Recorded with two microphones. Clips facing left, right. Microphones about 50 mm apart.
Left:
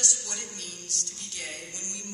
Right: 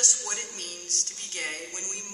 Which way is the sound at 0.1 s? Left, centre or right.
Right.